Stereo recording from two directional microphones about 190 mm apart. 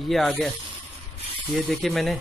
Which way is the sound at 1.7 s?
Centre (ahead or behind).